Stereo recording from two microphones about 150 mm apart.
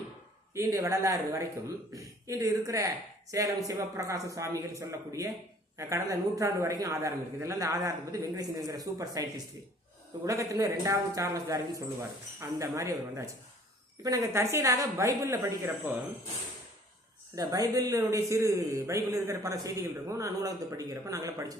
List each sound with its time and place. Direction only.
0.5 s a man's voice: 20° right (ahead or behind)
10.2 s a man's voice: 20° right (ahead or behind)
17.3 s a man's voice: 25° right (ahead or behind)